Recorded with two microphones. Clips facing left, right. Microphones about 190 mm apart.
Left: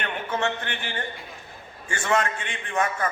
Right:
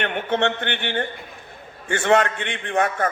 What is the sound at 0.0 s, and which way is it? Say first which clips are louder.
A man's voice: right 5 dB; 65° right (ahead or behind).